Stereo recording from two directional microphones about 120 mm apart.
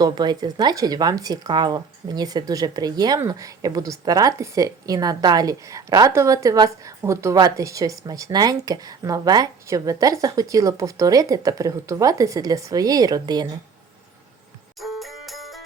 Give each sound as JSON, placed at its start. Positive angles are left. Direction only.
{"t": 0.0, "sound": "a woman's voice", "side_deg": -35}
{"t": 14.8, "sound": "music", "side_deg": 0}